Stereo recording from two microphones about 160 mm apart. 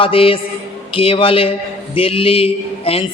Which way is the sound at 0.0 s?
35° left (ahead or behind).